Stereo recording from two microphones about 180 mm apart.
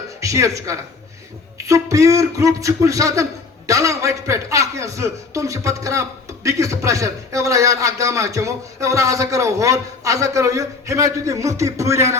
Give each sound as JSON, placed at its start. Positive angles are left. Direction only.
{"t": 0.2, "sound": "a woman's voice", "side_deg": -15}